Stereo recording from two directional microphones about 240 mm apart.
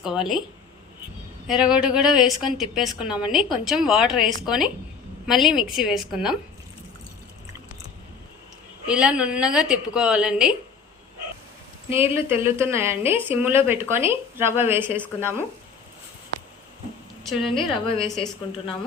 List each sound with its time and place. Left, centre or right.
0.0 s a woman's voice: centre
1.5 s a woman's voice: centre
8.9 s a woman's voice: centre
11.9 s a woman's voice: centre
17.2 s a woman's voice: centre
17.5 s a woman's voice: left
18.0 s a woman's voice: centre